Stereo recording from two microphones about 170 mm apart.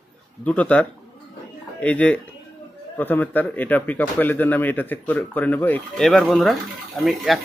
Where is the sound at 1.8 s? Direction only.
10° left (ahead or behind).